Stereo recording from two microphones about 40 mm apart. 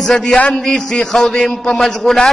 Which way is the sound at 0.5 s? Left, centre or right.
Centre.